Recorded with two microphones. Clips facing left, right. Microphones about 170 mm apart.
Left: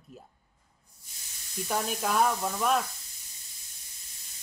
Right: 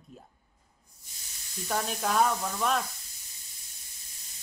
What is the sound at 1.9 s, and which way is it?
Speech, 5° left (ahead or behind).